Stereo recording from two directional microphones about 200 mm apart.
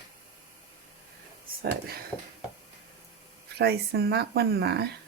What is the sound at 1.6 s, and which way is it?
Speech, 50° right (ahead or behind).